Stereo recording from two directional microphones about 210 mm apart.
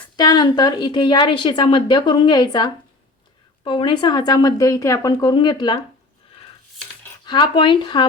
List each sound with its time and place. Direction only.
0.2 s a woman's voice: 20° left (ahead or behind)
7.3 s a woman's voice: 20° left (ahead or behind)